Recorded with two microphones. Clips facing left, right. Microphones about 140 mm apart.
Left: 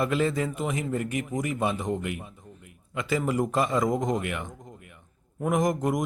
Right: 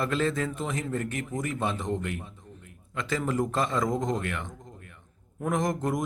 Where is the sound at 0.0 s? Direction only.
10° left (ahead or behind).